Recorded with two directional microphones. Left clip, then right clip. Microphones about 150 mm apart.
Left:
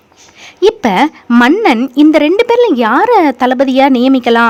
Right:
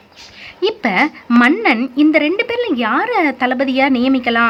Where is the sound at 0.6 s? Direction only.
45° left (ahead or behind).